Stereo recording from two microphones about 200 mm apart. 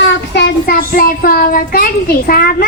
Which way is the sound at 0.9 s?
45° left (ahead or behind).